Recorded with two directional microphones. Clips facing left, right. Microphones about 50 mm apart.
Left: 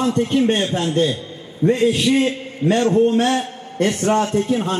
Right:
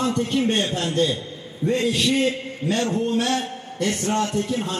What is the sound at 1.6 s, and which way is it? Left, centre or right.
A man's voice, left.